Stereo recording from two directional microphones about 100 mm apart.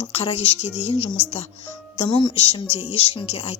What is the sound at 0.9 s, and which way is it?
Speech, 55° left (ahead or behind).